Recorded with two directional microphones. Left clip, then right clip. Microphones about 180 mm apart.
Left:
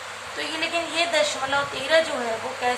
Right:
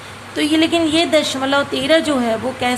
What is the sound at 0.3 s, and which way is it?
Speech, 50° right (ahead or behind).